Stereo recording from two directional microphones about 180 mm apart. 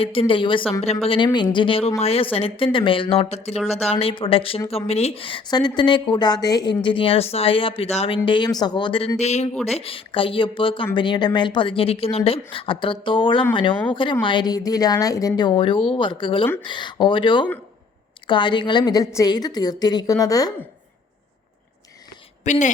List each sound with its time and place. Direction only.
0.0 s a woman's voice: 30° left (ahead or behind)
22.4 s a woman's voice: 40° left (ahead or behind)